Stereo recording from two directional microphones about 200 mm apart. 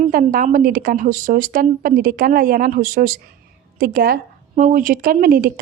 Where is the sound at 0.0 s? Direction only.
45° right (ahead or behind).